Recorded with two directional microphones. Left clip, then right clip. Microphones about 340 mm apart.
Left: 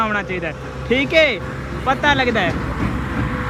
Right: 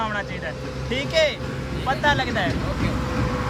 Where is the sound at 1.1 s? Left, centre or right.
Centre.